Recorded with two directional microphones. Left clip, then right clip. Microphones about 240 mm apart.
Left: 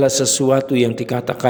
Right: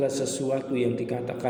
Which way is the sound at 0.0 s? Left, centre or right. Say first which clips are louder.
Left 11 dB; left.